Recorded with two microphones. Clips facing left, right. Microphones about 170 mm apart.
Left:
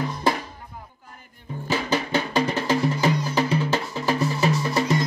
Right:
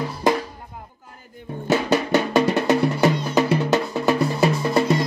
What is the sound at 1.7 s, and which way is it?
Music, 70° right (ahead or behind).